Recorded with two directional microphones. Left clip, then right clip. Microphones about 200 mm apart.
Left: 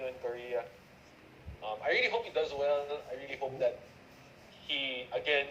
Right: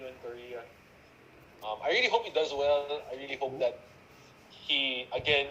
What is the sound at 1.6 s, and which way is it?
Speech, 20° right (ahead or behind).